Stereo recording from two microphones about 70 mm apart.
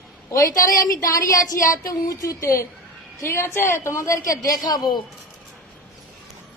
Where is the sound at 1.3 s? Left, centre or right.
Left.